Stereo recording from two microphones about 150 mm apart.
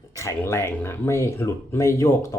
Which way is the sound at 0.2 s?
20° left (ahead or behind).